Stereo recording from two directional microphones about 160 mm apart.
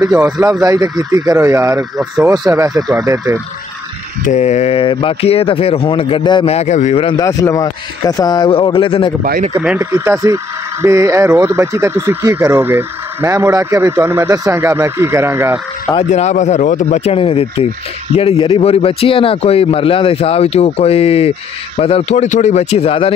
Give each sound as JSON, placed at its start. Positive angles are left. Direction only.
{"t": 0.1, "sound": "speech", "side_deg": -15}
{"t": 4.3, "sound": "speech", "side_deg": 45}
{"t": 7.2, "sound": "a man's voice", "side_deg": 20}
{"t": 9.6, "sound": "speech", "side_deg": -10}
{"t": 16.1, "sound": "speech", "side_deg": 45}